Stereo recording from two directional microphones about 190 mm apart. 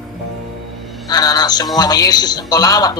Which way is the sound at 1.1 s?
20° left (ahead or behind).